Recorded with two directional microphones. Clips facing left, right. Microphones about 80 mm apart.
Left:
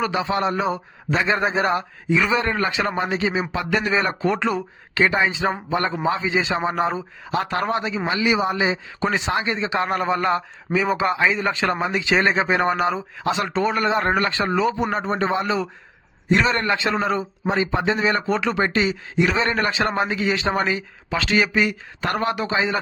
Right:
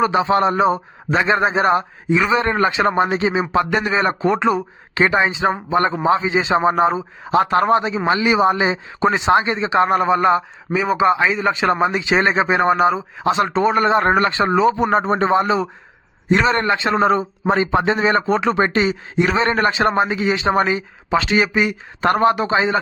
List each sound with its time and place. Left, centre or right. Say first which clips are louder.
0.0 s a man's voice: right 6 dB; right
9.0 s speech: right 9 dB; right
14.8 s a man's voice: right 6 dB; right
22.0 s a man's voice: right 7 dB; right